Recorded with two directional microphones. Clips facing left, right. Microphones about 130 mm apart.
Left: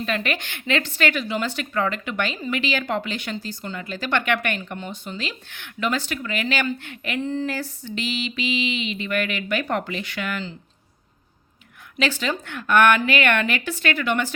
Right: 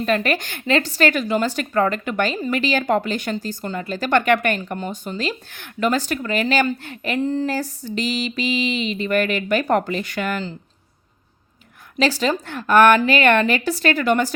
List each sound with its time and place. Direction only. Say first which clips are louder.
0.0 s speech: right 6 dB; 45° right (ahead or behind)
11.9 s speech: right 5 dB; 35° right (ahead or behind)